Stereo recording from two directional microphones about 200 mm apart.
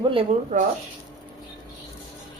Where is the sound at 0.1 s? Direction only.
30° right (ahead or behind).